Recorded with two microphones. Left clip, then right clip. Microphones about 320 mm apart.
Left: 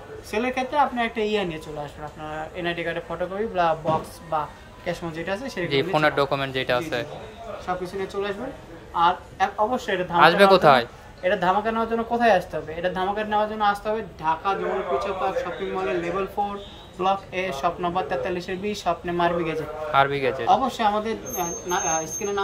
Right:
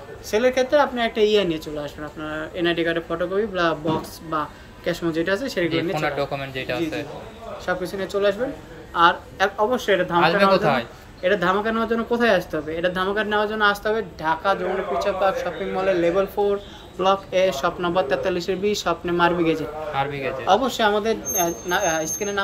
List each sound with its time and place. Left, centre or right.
0.3 s speech: centre
4.8 s speech: centre
10.1 s speech: centre
11.2 s speech: centre